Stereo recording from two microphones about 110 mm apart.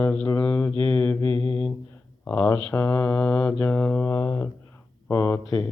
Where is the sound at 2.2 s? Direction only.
15° left (ahead or behind).